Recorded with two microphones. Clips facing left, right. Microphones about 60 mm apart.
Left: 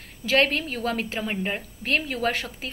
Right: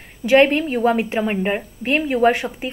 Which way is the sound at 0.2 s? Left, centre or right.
Centre.